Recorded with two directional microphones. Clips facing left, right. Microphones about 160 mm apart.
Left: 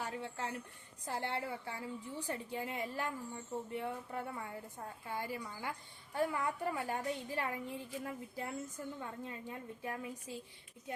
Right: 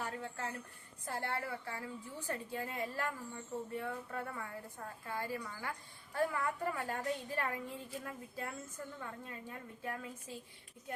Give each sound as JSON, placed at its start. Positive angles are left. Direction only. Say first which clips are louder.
{"t": 0.0, "sound": "a woman's voice", "louder": "even", "side_deg": 15}